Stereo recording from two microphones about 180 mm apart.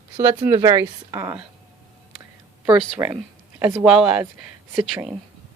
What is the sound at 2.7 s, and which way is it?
A woman's voice, 10° right (ahead or behind).